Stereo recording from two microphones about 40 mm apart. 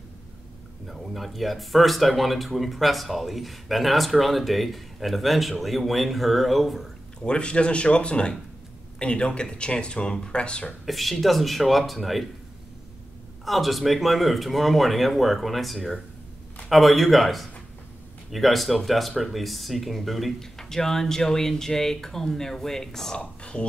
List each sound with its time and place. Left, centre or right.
0.8 s speech: centre
7.2 s speech: left
10.9 s speech: centre
13.5 s speech: centre
23.1 s speech: left